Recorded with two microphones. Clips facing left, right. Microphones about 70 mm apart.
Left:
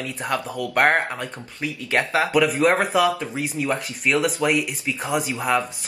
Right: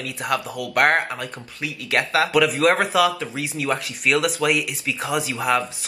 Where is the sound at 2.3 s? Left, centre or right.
Centre.